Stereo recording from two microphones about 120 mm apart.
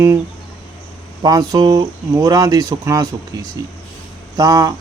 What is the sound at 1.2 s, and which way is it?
A man's voice, 35° right (ahead or behind).